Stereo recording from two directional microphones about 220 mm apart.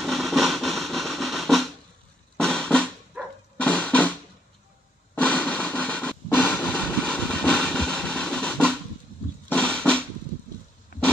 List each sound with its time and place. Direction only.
0.0 s music: centre (ahead or behind)
2.3 s drum: 5° left (ahead or behind)
3.1 s music: 5° right (ahead or behind)
3.5 s music: 5° left (ahead or behind)
5.1 s a sound: 5° left (ahead or behind)
9.5 s drum: 5° left (ahead or behind)
10.9 s a sound: 40° left (ahead or behind)